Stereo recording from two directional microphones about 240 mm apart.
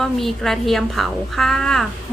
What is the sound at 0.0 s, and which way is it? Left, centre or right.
A woman's voice, centre.